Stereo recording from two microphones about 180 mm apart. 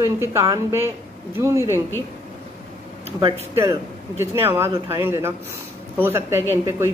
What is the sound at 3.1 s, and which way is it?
Speech, 25° right (ahead or behind).